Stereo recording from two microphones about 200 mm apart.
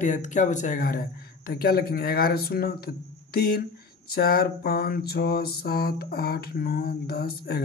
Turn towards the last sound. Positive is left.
turn(degrees=55)  # may be behind; listen again after turning